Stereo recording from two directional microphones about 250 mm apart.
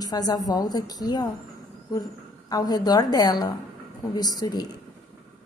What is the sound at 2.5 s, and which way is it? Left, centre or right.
A woman's voice, centre.